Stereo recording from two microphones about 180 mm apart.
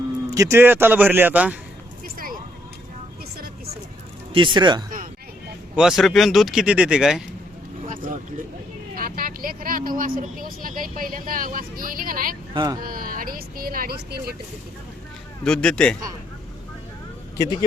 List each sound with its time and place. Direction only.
0.3 s a man's voice: 15° right (ahead or behind)
4.4 s speech: 25° right (ahead or behind)
5.7 s speech: 5° right (ahead or behind)
7.9 s vehicle: 45° right (ahead or behind)
9.0 s speech: 55° right (ahead or behind)
12.5 s speech: 25° right (ahead or behind)
12.8 s speech: 55° right (ahead or behind)
15.4 s speech: 5° left (ahead or behind)